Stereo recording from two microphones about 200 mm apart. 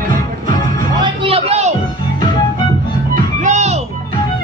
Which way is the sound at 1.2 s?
30° right (ahead or behind).